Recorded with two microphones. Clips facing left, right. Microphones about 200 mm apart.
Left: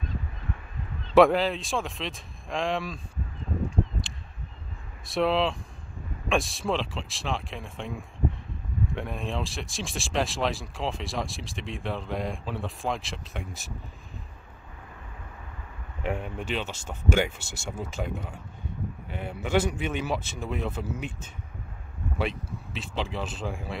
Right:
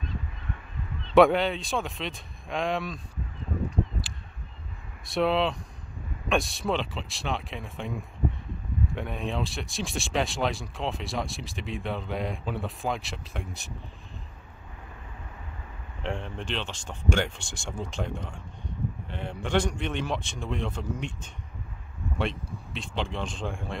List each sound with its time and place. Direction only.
1.1 s speech: centre (ahead or behind)
5.0 s speech: centre (ahead or behind)
8.9 s speech: centre (ahead or behind)
16.0 s speech: 10° left (ahead or behind)